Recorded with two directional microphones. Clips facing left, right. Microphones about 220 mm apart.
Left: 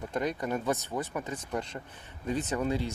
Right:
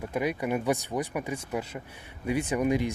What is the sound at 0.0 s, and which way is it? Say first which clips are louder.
Speech: right 3 dB; 10° right (ahead or behind).